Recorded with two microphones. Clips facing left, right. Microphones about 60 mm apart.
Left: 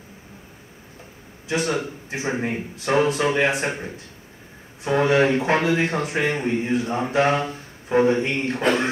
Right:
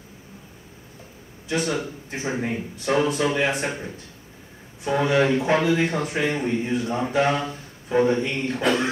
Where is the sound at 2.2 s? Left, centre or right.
Left.